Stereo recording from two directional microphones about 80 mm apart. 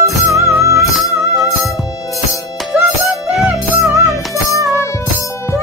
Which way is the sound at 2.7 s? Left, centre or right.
Centre.